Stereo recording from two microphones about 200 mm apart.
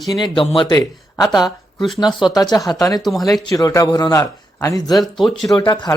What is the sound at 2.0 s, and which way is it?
Speech, 20° left (ahead or behind).